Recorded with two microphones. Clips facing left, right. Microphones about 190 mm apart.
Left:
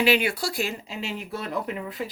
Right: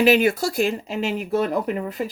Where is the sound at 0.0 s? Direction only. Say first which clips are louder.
Right 6 dB; 45° right (ahead or behind).